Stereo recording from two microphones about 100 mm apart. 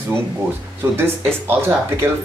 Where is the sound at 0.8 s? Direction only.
25° right (ahead or behind).